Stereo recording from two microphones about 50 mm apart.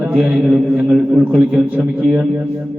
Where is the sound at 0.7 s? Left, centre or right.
Right.